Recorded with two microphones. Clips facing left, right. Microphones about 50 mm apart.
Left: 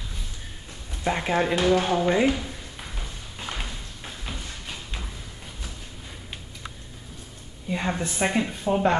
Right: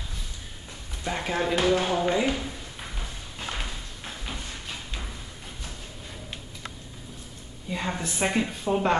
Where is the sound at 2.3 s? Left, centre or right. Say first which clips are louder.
Left 2 dB; centre.